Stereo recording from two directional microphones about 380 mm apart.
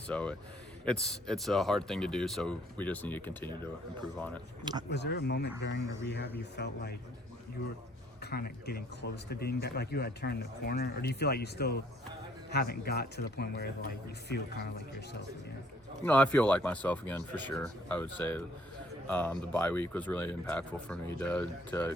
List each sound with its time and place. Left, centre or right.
0.1 s speech: centre
4.9 s speech: left
8.2 s speech: left
16.0 s speech: centre